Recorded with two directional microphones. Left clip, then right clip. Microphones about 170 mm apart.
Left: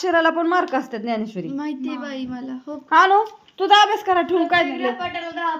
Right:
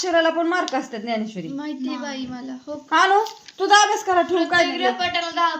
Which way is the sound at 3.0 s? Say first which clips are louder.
Left 2 dB; 15° left (ahead or behind).